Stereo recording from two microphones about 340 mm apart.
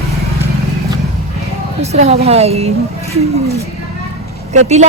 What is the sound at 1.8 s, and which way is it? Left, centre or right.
A woman's voice, centre.